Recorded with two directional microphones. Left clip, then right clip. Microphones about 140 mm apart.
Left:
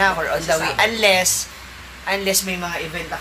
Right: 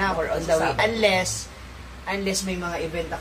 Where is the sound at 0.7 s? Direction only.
15° left (ahead or behind).